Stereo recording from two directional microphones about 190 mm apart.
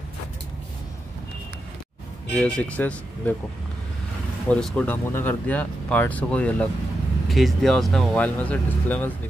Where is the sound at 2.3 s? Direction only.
5° left (ahead or behind).